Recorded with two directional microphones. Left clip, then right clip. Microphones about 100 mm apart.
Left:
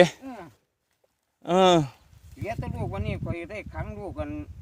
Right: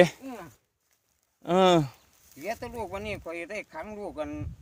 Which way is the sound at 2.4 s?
30° right (ahead or behind).